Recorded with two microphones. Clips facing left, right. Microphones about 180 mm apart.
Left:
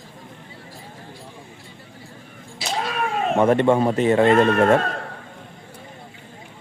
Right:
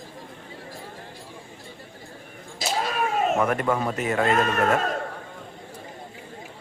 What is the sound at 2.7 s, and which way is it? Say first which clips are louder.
Cat: left 1 dB; centre (ahead or behind).